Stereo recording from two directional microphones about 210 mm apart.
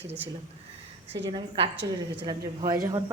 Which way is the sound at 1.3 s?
25° right (ahead or behind).